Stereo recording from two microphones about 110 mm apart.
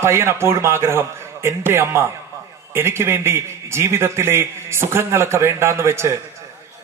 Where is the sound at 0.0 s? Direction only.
25° right (ahead or behind).